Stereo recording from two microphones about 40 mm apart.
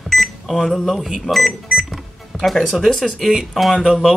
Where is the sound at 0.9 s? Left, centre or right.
Centre.